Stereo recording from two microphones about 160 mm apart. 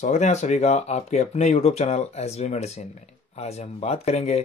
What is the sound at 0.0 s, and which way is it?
Speech, 50° left (ahead or behind).